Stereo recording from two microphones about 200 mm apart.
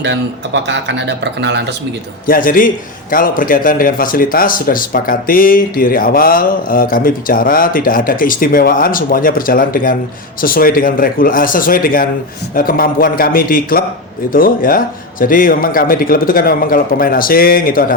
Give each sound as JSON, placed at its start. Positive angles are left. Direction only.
{"t": 0.0, "sound": "speech", "side_deg": -60}
{"t": 2.2, "sound": "a man's voice", "side_deg": 45}